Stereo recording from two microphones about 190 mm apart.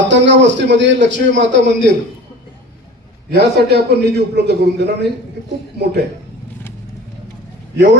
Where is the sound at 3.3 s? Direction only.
60° right (ahead or behind).